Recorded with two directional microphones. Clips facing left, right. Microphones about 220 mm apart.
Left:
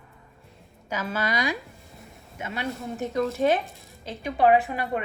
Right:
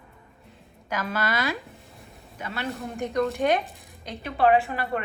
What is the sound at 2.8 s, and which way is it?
Speech, centre (ahead or behind).